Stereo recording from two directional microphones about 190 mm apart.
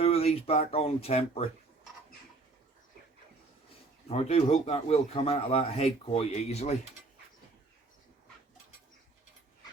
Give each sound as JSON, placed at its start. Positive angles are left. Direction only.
{"t": 0.0, "sound": "speech", "side_deg": 30}
{"t": 4.1, "sound": "speech", "side_deg": 35}